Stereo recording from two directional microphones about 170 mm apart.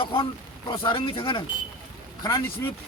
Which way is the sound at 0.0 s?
30° left (ahead or behind).